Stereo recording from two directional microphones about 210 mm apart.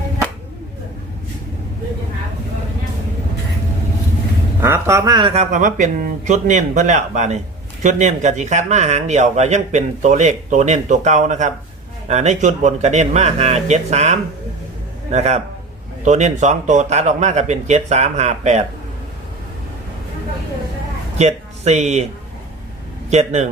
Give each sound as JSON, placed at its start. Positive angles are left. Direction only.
{"t": 4.6, "sound": "speech", "side_deg": -15}
{"t": 21.2, "sound": "speech", "side_deg": -30}
{"t": 23.0, "sound": "speech", "side_deg": -35}